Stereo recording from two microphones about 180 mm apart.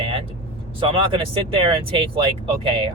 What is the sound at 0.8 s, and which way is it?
Speech, 30° right (ahead or behind).